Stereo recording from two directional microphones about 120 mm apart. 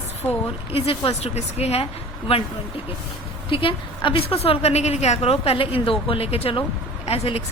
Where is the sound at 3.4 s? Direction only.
45° left (ahead or behind).